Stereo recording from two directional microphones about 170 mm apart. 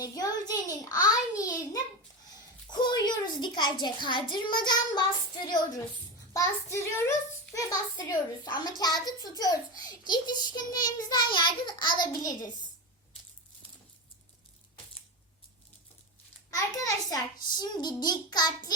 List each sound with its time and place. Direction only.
0.0 s a sound: 20° left (ahead or behind)
2.6 s a child's voice: 25° left (ahead or behind)
6.3 s a child's voice: 15° left (ahead or behind)
16.5 s a child's voice: 20° left (ahead or behind)